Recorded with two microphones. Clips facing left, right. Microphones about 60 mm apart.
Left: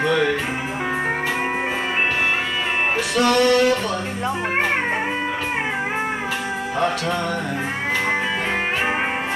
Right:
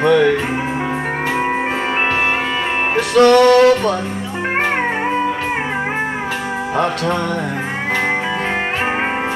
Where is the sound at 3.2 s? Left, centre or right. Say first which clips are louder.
Right 8 dB; right.